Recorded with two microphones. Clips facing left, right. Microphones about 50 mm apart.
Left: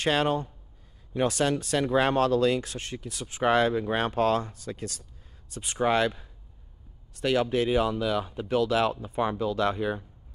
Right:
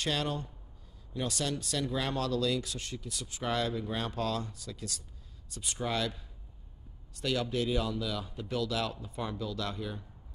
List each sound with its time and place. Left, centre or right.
0.0 s speech: left